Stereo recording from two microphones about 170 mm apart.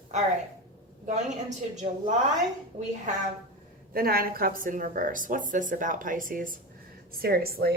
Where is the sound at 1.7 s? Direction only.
45° right (ahead or behind).